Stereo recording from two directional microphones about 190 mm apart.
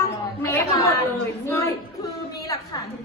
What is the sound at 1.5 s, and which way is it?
A woman's voice, 15° left (ahead or behind).